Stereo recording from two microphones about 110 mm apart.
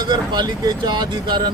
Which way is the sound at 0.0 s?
40° right (ahead or behind).